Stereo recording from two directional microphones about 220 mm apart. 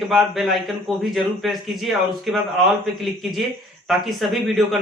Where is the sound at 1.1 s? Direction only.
Centre (ahead or behind).